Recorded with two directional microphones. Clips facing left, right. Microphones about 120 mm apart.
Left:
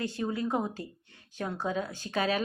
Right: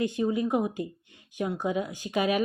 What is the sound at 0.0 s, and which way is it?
A woman's voice, 20° right (ahead or behind).